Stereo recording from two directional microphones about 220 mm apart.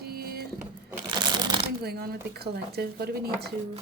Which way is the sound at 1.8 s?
45° right (ahead or behind).